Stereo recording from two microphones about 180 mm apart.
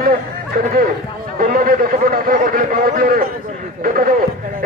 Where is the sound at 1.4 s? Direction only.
50° right (ahead or behind).